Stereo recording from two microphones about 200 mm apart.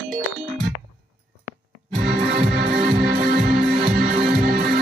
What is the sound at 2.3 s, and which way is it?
Music, 50° right (ahead or behind).